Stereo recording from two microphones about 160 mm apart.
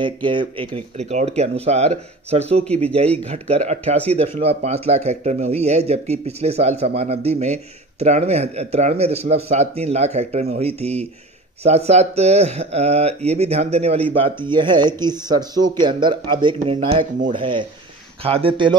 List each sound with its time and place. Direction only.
0.0 s speech: 30° right (ahead or behind)